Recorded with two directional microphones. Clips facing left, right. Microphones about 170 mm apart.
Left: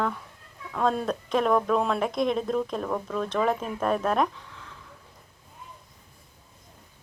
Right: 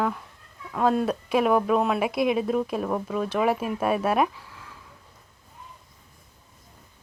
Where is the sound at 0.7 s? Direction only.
5° right (ahead or behind).